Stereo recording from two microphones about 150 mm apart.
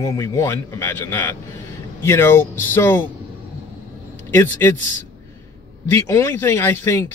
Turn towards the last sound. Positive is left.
turn(degrees=15)  # may be behind; listen again after turning